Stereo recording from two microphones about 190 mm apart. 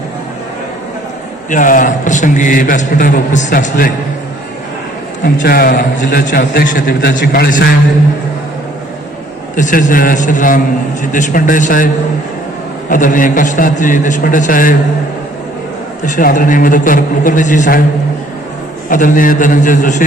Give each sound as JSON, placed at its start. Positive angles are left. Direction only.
{"t": 1.5, "sound": "a man's voice", "side_deg": 45}
{"t": 5.4, "sound": "a man's voice", "side_deg": 55}
{"t": 9.6, "sound": "a man's voice", "side_deg": 40}
{"t": 12.9, "sound": "a man's voice", "side_deg": 45}
{"t": 16.0, "sound": "a man's voice", "side_deg": 45}
{"t": 18.9, "sound": "a man's voice", "side_deg": 45}